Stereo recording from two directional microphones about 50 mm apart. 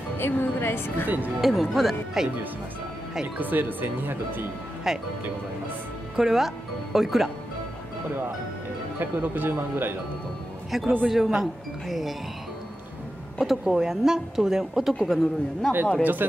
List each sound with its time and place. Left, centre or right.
0.2 s a woman's voice: left
1.0 s speech: right
1.4 s speech: centre
3.3 s speech: right
4.9 s a woman's voice: centre
6.1 s speech: centre
9.0 s speech: right
11.1 s speech: centre
13.4 s a woman's voice: centre
15.7 s speech: centre
16.0 s speech: right